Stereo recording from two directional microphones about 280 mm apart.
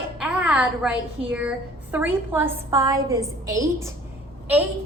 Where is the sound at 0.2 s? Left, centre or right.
Centre.